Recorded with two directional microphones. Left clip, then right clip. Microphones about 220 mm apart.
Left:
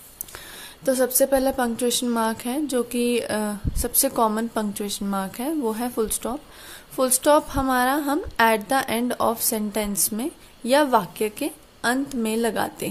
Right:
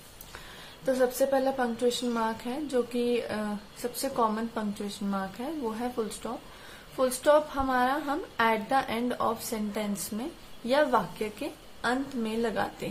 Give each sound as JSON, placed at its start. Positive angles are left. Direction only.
{"t": 0.8, "sound": "a woman's voice", "side_deg": 45}